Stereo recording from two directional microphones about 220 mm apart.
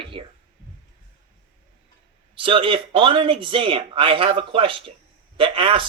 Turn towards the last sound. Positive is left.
turn(degrees=-25)  # may be behind; listen again after turning